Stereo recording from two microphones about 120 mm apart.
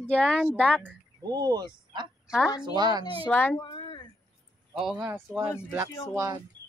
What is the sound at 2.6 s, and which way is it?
Speech, 40° right (ahead or behind).